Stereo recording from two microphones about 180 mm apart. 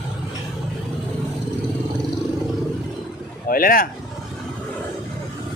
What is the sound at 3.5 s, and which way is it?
Speech, 55° left (ahead or behind).